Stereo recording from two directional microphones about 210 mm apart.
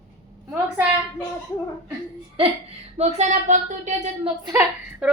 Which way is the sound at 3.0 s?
30° right (ahead or behind).